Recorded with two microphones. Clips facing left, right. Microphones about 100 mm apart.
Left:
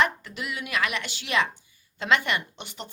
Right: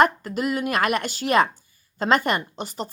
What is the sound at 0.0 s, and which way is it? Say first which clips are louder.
A woman's voice: right 7 dB; 45° right (ahead or behind).